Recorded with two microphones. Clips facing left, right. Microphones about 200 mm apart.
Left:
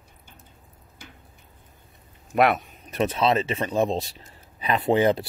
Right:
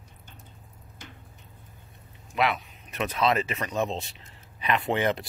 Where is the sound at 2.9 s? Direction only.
30° left (ahead or behind).